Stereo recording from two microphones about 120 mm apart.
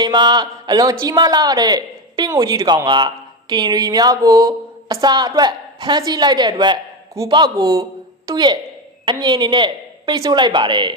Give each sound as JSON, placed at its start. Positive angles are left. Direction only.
{"t": 0.0, "sound": "speech", "side_deg": -40}